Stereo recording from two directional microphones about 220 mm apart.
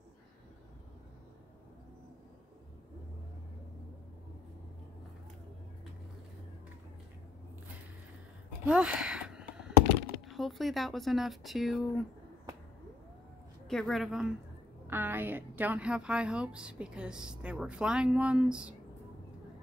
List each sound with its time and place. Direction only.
8.6 s a sound: 5° right (ahead or behind)
10.3 s a woman's voice: centre (ahead or behind)
13.7 s a woman's voice: centre (ahead or behind)